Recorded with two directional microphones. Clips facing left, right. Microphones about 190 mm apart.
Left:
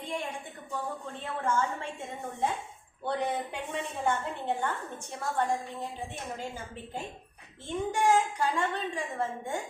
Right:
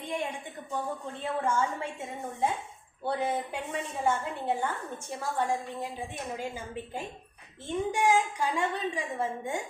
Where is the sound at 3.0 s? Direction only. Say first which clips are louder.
Right 1 dB; 5° right (ahead or behind).